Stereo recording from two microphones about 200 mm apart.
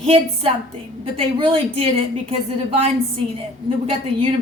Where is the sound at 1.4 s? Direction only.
30° right (ahead or behind).